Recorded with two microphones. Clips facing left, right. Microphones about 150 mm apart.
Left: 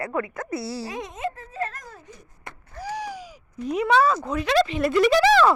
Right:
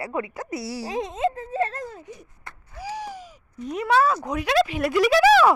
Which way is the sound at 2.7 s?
5° right (ahead or behind).